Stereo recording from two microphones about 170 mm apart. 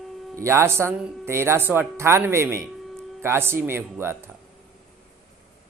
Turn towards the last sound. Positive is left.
turn(degrees=-15)  # may be behind; listen again after turning